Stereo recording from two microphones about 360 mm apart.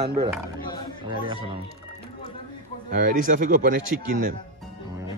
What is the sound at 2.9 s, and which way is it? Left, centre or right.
Speech, right.